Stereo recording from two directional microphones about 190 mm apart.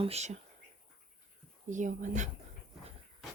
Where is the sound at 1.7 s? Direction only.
40° right (ahead or behind).